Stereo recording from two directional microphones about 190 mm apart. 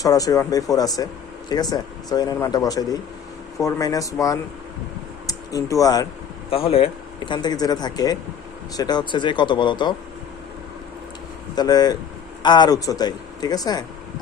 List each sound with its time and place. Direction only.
0.0 s speech: 20° left (ahead or behind)
6.5 s speech: 30° left (ahead or behind)
11.5 s speech: 20° left (ahead or behind)